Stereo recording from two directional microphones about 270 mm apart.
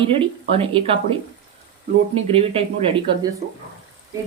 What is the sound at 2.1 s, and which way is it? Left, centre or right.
A woman's voice, right.